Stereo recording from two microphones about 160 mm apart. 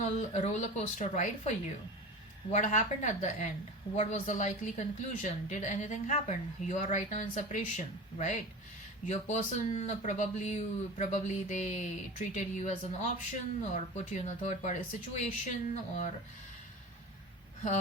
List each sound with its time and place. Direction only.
0.0 s speech: 50° left (ahead or behind)